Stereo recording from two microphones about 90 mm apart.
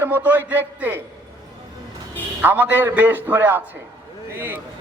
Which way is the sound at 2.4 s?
20° right (ahead or behind).